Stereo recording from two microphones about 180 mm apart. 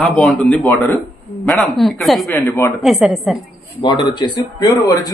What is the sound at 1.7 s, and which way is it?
A man's voice, centre (ahead or behind).